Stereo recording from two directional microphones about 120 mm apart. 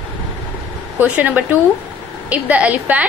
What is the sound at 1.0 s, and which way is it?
A woman's voice, 15° right (ahead or behind).